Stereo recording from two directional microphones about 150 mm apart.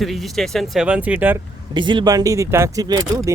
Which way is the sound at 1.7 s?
30° right (ahead or behind).